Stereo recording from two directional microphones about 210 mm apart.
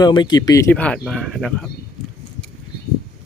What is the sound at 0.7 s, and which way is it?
Speech, 5° left (ahead or behind).